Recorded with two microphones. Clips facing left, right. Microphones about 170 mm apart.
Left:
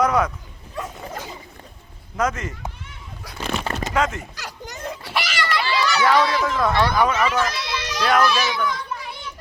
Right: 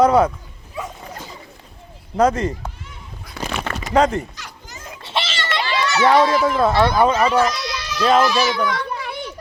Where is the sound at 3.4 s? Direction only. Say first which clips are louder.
Even; 85° right.